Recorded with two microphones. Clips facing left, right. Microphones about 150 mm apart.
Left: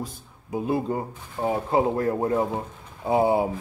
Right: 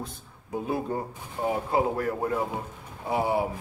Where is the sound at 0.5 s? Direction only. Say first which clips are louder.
Left 4 dB; 15° left (ahead or behind).